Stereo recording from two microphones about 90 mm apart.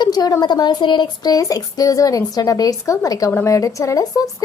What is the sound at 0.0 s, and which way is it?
A woman's voice, 45° left (ahead or behind).